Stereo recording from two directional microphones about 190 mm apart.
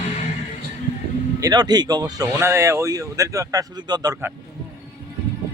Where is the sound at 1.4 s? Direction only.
20° right (ahead or behind).